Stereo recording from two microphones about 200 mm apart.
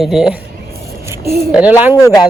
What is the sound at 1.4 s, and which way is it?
Speech, 10° right (ahead or behind).